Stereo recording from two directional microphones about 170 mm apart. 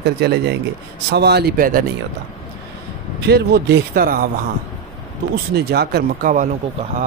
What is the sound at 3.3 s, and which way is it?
Speech, 75° right (ahead or behind).